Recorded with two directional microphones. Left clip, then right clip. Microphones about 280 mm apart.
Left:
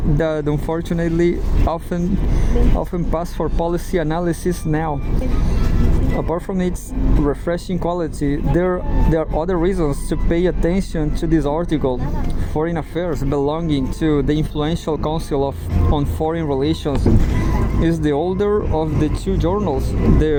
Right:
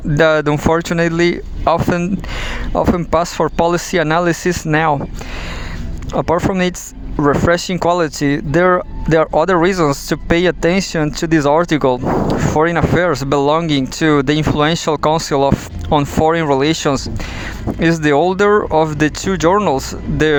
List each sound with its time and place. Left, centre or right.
0.1 s speech: right
6.1 s speech: right
15.1 s speech: right
16.0 s speech: right